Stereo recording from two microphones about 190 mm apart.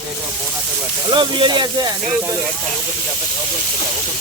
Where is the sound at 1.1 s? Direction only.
25° right (ahead or behind).